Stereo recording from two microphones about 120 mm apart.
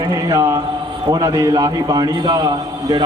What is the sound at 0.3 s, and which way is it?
A man's voice, 30° right (ahead or behind).